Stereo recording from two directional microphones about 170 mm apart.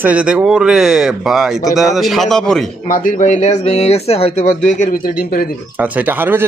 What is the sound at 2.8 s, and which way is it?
Speech, 55° left (ahead or behind).